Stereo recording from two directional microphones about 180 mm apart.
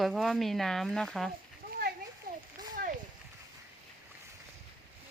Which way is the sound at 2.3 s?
50° right (ahead or behind).